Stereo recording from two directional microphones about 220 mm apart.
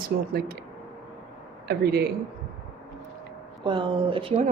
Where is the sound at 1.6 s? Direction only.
45° right (ahead or behind).